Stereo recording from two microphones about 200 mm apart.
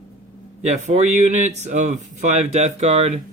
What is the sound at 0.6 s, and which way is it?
Speech, 35° right (ahead or behind).